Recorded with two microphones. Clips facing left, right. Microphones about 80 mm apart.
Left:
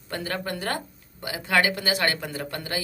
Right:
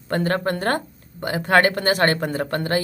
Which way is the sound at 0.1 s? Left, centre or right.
Right.